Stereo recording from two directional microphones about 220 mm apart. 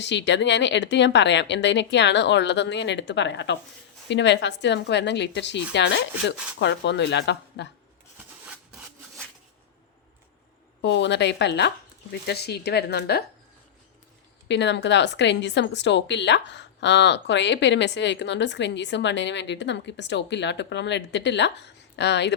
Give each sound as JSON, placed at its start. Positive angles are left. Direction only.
{"t": 0.0, "sound": "a woman's voice", "side_deg": 55}
{"t": 10.8, "sound": "a woman's voice", "side_deg": 55}
{"t": 14.4, "sound": "a woman's voice", "side_deg": 55}